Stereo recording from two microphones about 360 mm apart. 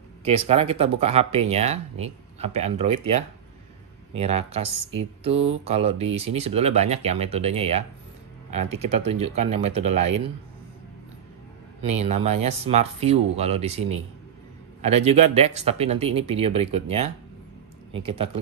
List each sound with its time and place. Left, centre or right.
0.2 s speech: centre
11.8 s speech: centre